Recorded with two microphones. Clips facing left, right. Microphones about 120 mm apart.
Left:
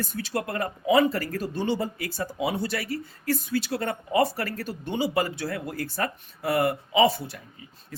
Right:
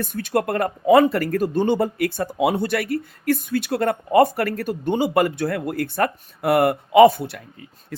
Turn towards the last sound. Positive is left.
turn(degrees=-65)  # may be behind; listen again after turning